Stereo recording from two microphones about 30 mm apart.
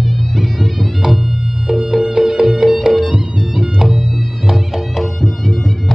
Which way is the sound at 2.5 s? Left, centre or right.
Centre.